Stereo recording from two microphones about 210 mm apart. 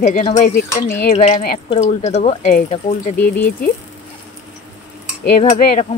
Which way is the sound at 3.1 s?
10° left (ahead or behind).